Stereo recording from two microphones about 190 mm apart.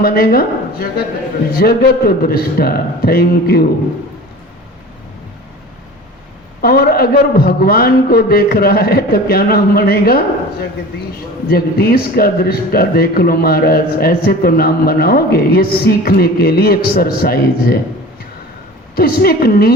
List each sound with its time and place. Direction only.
0.0 s a man's voice: 55° left (ahead or behind)
6.6 s speech: 50° left (ahead or behind)
18.9 s speech: 55° left (ahead or behind)